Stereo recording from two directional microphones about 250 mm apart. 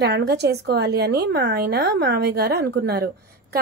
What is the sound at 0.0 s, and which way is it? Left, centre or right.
A woman's voice, right.